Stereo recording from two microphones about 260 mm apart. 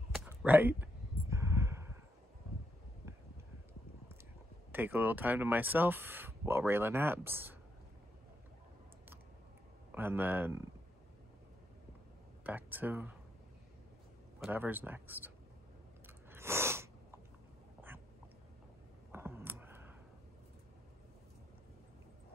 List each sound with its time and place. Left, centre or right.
0.1 s a sound: centre
4.7 s speech: centre
9.9 s speech: centre
12.4 s speech: centre
14.4 s speech: centre
16.3 s sneeze: centre
19.1 s clicking: centre